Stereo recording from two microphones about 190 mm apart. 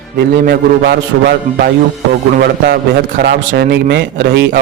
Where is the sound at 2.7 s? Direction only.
55° right (ahead or behind).